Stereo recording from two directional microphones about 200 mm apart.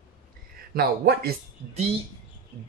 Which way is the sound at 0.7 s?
50° right (ahead or behind).